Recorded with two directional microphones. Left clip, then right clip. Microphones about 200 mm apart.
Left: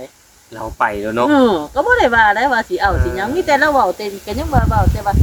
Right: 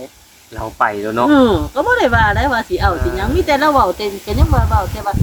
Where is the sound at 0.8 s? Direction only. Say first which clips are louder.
Right 1 dB; 60° left (ahead or behind).